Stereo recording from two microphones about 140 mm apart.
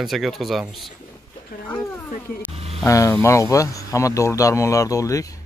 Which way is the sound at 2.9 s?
20° left (ahead or behind).